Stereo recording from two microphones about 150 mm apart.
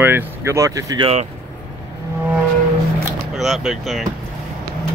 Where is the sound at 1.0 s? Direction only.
40° right (ahead or behind).